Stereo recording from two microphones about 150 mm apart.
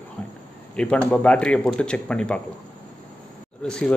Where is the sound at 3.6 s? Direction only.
5° left (ahead or behind).